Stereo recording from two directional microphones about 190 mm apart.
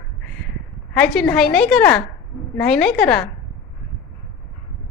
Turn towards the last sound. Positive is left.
turn(degrees=0)  # may be behind; listen again after turning